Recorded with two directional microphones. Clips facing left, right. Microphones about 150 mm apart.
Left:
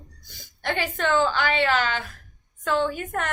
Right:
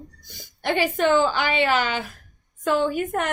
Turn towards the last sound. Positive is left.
turn(degrees=-15)  # may be behind; listen again after turning